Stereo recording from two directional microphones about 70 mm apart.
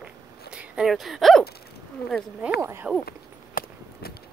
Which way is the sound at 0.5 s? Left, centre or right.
Centre.